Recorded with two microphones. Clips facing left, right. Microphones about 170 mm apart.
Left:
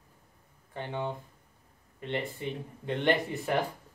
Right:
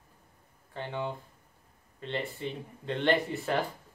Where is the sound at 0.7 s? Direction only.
15° left (ahead or behind).